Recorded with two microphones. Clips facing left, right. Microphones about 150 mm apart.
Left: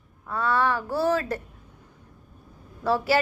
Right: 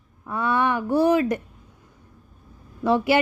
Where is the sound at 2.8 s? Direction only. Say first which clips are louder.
Right 3 dB; 20° right (ahead or behind).